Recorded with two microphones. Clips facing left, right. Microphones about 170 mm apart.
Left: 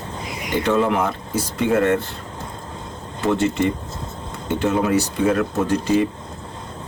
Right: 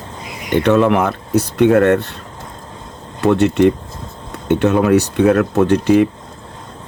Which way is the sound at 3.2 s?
65° right (ahead or behind).